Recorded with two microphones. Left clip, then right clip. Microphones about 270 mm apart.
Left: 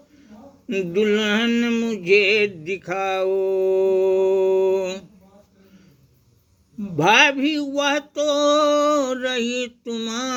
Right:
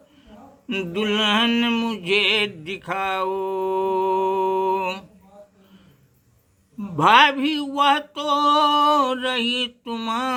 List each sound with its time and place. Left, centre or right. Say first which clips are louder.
0.7 s mantra: left 4 dB; right
6.7 s mantra: right 1 dB; centre